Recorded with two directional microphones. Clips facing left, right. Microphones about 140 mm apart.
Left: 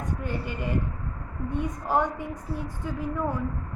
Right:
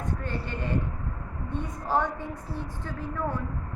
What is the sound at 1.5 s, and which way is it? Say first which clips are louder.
A woman's voice: left 3 dB; 15° left (ahead or behind).